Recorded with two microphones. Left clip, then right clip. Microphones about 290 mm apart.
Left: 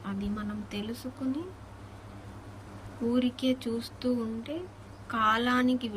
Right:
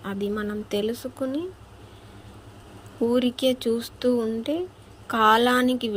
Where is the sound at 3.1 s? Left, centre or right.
Centre.